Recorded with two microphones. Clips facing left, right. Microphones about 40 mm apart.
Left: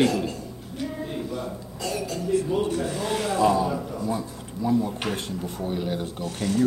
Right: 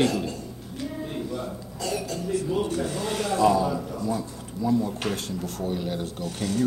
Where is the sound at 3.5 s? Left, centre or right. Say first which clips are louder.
Even; left.